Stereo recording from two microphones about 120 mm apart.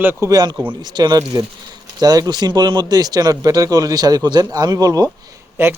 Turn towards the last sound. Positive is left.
turn(degrees=-20)  # may be behind; listen again after turning